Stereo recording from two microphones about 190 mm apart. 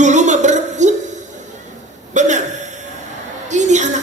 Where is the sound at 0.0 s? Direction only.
40° right (ahead or behind).